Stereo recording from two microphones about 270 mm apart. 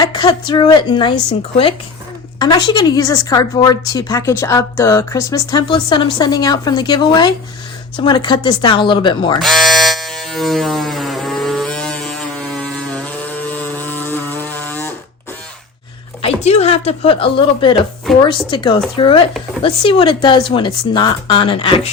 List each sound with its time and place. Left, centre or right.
0.0 s a woman's voice: centre
9.4 s electric shaver: centre
16.2 s a woman's voice: left